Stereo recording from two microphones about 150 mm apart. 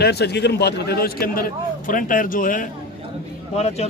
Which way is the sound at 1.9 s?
65° left (ahead or behind).